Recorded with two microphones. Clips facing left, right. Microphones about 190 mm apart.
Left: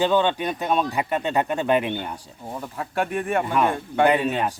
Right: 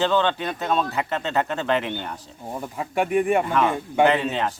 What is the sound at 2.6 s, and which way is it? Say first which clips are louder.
Speech: right 2 dB; 15° right (ahead or behind).